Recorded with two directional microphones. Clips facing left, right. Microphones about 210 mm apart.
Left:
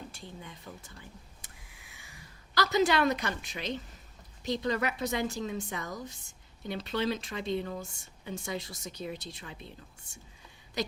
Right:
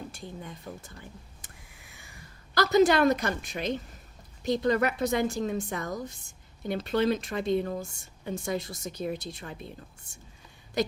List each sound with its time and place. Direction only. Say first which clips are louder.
0.7 s speech: right 5 dB; 40° right (ahead or behind)
2.6 s a woman's voice: right 5 dB; 45° right (ahead or behind)
10.8 s a sound: right 6 dB; 50° right (ahead or behind)